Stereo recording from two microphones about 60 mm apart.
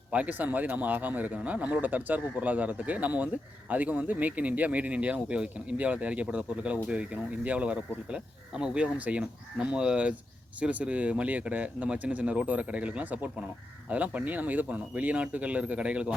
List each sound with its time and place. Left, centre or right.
0.1 s speech: right